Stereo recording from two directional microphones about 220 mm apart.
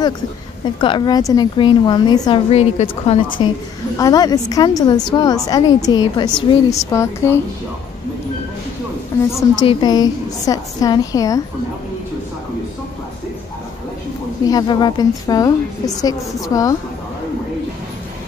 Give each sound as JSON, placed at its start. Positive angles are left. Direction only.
{"t": 0.7, "sound": "a woman's voice", "side_deg": 20}
{"t": 2.5, "sound": "a woman's voice", "side_deg": 30}
{"t": 4.0, "sound": "a woman's voice", "side_deg": 15}
{"t": 9.6, "sound": "a woman's voice", "side_deg": 20}
{"t": 14.5, "sound": "a woman's voice", "side_deg": 20}